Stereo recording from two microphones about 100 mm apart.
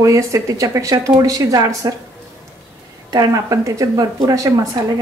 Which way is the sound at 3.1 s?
35° right (ahead or behind).